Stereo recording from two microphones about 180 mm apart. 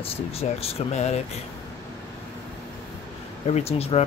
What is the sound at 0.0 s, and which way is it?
Speech, 35° left (ahead or behind).